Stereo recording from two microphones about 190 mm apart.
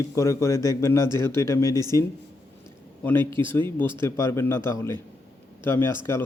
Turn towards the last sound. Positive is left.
turn(degrees=10)  # may be behind; listen again after turning